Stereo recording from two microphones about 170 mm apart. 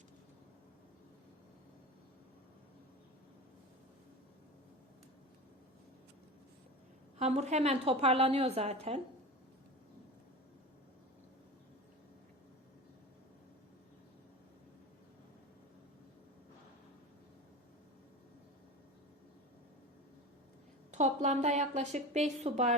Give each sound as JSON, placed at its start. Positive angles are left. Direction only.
{"t": 7.2, "sound": "a woman's voice", "side_deg": -40}
{"t": 20.9, "sound": "a woman's voice", "side_deg": -45}